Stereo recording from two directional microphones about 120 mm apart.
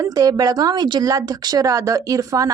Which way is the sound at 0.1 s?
30° right (ahead or behind).